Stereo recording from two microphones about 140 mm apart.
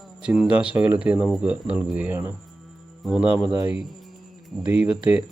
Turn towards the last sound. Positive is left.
turn(degrees=-5)  # may be behind; listen again after turning